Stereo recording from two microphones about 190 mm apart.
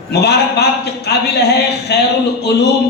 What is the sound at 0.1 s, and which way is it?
Speech, 60° left (ahead or behind).